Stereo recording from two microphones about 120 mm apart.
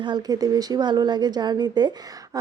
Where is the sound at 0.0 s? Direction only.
35° right (ahead or behind).